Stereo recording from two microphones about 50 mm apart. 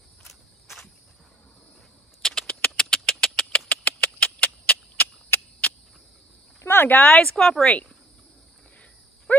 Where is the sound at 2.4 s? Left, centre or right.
Left.